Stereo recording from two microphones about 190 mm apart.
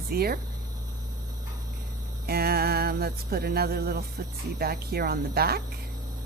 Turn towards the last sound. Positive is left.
turn(degrees=-55)  # may be behind; listen again after turning